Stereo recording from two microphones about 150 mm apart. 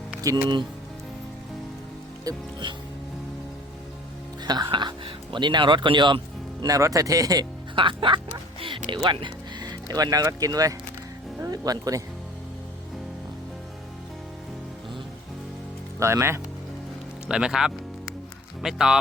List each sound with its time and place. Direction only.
0.2 s speech: 25° right (ahead or behind)
2.2 s speech: 30° right (ahead or behind)
4.4 s speech: 30° right (ahead or behind)
16.0 s speech: 20° right (ahead or behind)
17.2 s speech: 5° right (ahead or behind)